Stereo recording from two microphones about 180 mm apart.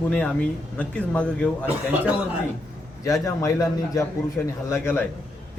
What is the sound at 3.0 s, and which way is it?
Speech, 15° left (ahead or behind).